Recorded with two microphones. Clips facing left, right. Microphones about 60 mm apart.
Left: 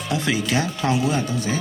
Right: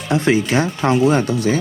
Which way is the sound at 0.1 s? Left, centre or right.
Right.